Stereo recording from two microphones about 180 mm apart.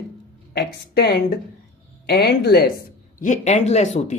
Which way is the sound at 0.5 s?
65° left (ahead or behind).